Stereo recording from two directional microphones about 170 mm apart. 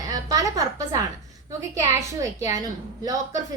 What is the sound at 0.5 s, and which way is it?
Speech, 20° right (ahead or behind).